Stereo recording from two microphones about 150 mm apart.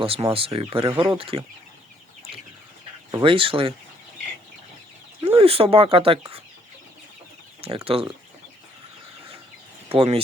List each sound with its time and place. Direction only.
0.0 s speech: 40° right (ahead or behind)
3.2 s speech: 35° right (ahead or behind)
5.2 s speech: 40° right (ahead or behind)
7.9 s speech: 40° right (ahead or behind)
9.9 s speech: 40° right (ahead or behind)